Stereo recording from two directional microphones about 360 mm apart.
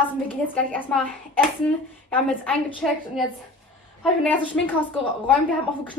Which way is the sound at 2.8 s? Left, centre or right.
Centre.